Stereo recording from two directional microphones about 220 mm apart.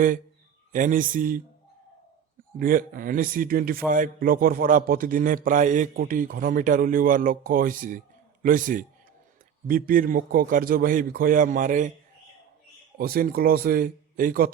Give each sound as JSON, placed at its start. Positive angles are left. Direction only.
{"t": 0.7, "sound": "a man's voice", "side_deg": -35}
{"t": 2.6, "sound": "a man's voice", "side_deg": -40}
{"t": 13.0, "sound": "a man's voice", "side_deg": -40}